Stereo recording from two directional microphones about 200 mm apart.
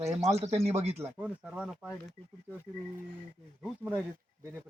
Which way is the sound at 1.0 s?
5° right (ahead or behind).